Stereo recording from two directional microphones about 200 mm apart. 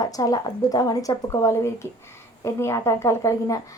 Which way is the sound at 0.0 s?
15° left (ahead or behind).